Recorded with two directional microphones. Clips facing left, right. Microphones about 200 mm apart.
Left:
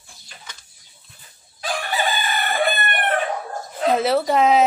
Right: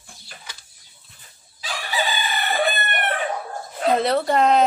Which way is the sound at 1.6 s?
55° left (ahead or behind).